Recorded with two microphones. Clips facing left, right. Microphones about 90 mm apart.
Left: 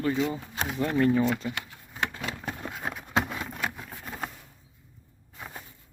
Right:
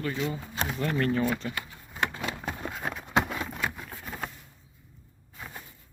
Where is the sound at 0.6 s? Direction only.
15° left (ahead or behind).